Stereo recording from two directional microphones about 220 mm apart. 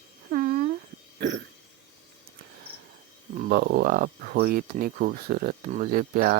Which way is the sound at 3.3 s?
45° right (ahead or behind).